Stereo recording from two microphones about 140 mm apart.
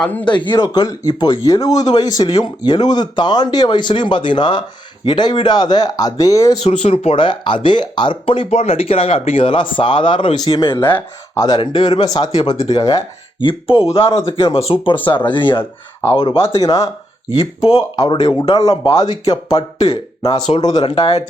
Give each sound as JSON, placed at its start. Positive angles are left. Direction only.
{"t": 0.0, "sound": "speech", "side_deg": 10}
{"t": 0.3, "sound": "speech", "side_deg": 35}
{"t": 6.6, "sound": "speech", "side_deg": 40}
{"t": 11.3, "sound": "speech", "side_deg": 30}
{"t": 17.2, "sound": "speech", "side_deg": 45}
{"t": 17.9, "sound": "speech", "side_deg": 30}